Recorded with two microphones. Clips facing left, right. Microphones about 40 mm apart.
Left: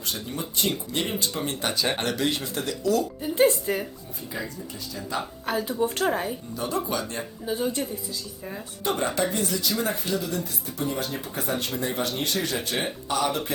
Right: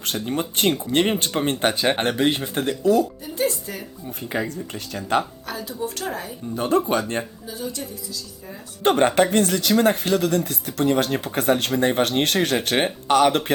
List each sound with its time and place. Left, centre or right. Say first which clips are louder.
0.0 s speech: right 7 dB; right
3.3 s a woman's voice: left 4 dB; left
4.2 s speech: right 7 dB; right
5.5 s speech: left 4 dB; left
6.6 s speech: right 8 dB; right
7.4 s a woman's voice: left 4 dB; left
8.8 s speech: right 8 dB; right